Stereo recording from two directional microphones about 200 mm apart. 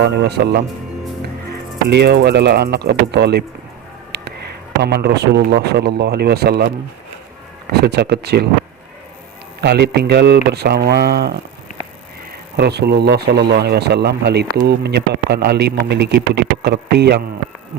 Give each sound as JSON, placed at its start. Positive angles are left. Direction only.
{"t": 0.0, "sound": "a man's voice", "side_deg": -55}
{"t": 1.9, "sound": "a man's voice", "side_deg": -55}
{"t": 4.1, "sound": "a sound", "side_deg": -55}
{"t": 4.8, "sound": "speech", "side_deg": -55}
{"t": 7.7, "sound": "speech", "side_deg": -55}
{"t": 9.6, "sound": "speech", "side_deg": -55}
{"t": 12.5, "sound": "a man's voice", "side_deg": -55}